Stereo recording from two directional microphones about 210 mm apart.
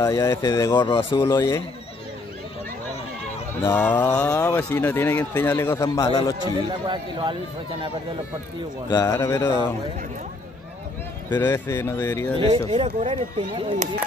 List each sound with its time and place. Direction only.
0.0 s speech: 15° left (ahead or behind)
3.6 s speech: 10° left (ahead or behind)
6.9 s speech: 20° right (ahead or behind)
8.8 s speech: 15° left (ahead or behind)
11.2 s speech: 10° left (ahead or behind)
12.4 s speech: 25° right (ahead or behind)